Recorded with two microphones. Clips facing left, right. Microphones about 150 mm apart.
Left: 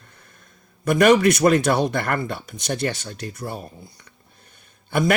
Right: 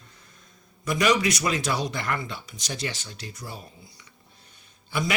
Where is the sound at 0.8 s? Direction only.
55° left (ahead or behind).